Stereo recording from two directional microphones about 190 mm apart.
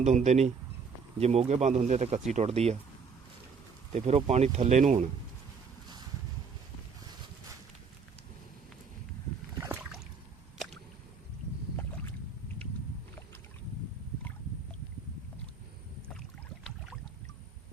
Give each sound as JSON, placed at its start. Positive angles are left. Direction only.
{"t": 0.0, "sound": "speech", "side_deg": -35}
{"t": 3.9, "sound": "speech", "side_deg": -35}
{"t": 9.6, "sound": "boat", "side_deg": -15}
{"t": 16.6, "sound": "boat", "side_deg": 0}